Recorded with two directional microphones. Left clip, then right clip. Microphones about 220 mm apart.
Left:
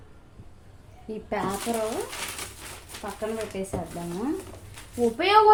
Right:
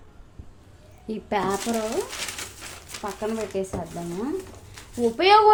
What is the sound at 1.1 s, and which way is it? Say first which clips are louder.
Speech: right 3 dB; 50° right (ahead or behind).